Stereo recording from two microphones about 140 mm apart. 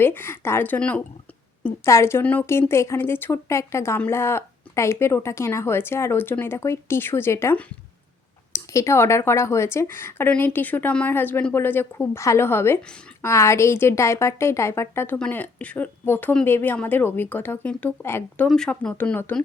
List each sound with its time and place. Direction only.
0.0 s speech: 15° left (ahead or behind)